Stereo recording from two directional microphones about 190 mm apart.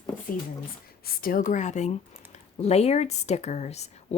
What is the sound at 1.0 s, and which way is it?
Speech, 50° left (ahead or behind).